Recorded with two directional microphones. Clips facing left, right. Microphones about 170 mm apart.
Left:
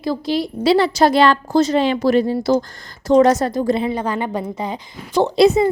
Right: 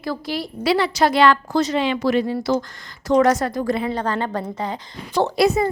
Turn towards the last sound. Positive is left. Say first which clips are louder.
# left 4 dB
turn(degrees=20)  # may be behind; listen again after turning